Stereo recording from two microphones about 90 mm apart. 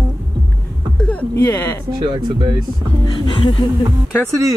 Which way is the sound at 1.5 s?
25° left (ahead or behind).